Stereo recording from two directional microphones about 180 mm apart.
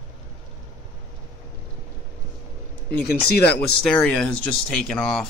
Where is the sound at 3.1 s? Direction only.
60° left (ahead or behind).